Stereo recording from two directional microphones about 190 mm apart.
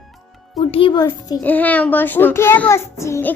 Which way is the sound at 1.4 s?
10° left (ahead or behind).